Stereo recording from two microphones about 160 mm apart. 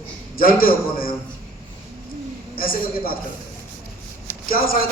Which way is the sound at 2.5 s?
65° left (ahead or behind).